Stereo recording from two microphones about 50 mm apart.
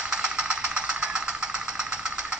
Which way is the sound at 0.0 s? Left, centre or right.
Centre.